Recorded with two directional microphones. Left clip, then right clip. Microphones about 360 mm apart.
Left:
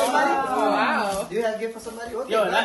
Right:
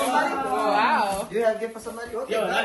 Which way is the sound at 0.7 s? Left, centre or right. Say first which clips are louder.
Right 4 dB; right.